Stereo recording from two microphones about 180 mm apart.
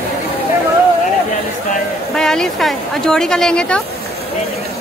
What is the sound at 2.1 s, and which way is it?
A woman's voice, 5° left (ahead or behind).